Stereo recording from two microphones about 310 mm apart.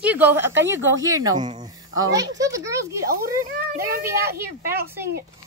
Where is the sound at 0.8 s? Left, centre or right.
Right.